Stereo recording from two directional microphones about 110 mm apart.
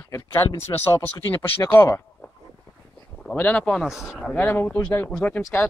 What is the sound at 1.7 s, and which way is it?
Speech, 20° left (ahead or behind).